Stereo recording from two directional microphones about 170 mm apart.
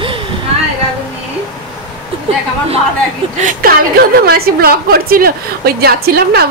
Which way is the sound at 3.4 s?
60° right (ahead or behind).